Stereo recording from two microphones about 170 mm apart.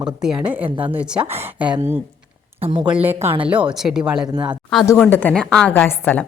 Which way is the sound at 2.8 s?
10° right (ahead or behind).